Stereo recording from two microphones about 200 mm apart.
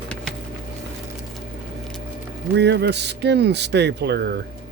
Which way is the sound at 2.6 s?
60° right (ahead or behind).